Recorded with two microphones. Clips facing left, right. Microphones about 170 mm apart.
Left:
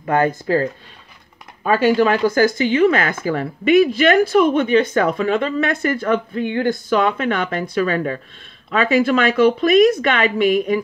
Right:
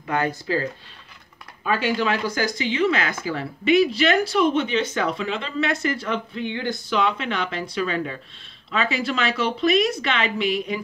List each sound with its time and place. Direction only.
0.0 s speech: 50° left (ahead or behind)